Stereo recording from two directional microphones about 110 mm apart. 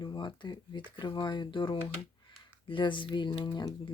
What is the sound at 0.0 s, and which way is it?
Speech, 45° left (ahead or behind).